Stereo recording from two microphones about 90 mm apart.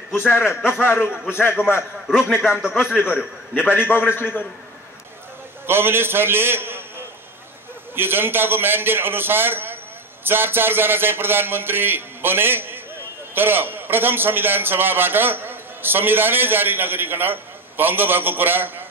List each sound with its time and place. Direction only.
0.3 s a man's voice: 25° left (ahead or behind)
2.0 s a man's voice: 5° right (ahead or behind)
3.5 s a man's voice: 25° left (ahead or behind)
5.7 s a man's voice: 25° right (ahead or behind)
7.9 s a man's voice: 25° right (ahead or behind)